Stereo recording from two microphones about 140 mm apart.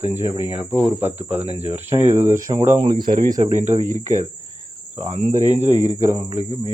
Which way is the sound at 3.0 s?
90° right.